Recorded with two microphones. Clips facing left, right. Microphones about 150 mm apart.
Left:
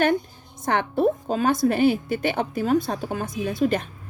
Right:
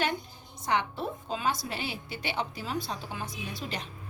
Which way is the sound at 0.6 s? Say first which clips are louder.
Left 9 dB; 50° left (ahead or behind).